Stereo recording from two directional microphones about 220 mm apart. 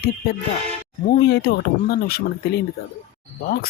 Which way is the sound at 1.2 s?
50° left (ahead or behind).